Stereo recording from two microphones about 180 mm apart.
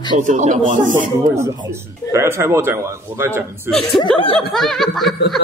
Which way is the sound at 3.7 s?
Centre (ahead or behind).